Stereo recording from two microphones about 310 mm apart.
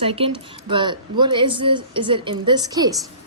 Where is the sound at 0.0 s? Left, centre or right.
Centre.